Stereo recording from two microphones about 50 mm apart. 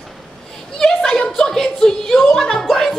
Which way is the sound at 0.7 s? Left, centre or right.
Centre.